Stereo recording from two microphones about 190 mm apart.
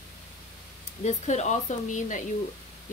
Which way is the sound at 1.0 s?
35° left (ahead or behind).